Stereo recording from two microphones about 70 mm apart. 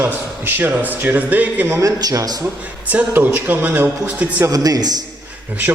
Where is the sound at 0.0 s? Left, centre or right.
Right.